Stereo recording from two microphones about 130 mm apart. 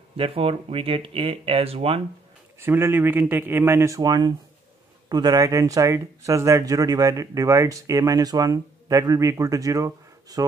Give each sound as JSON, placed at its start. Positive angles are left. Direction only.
{"t": 0.2, "sound": "speech", "side_deg": -45}
{"t": 2.6, "sound": "speech", "side_deg": -15}